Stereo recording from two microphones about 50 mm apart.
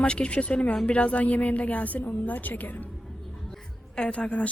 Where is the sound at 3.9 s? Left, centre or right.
Centre.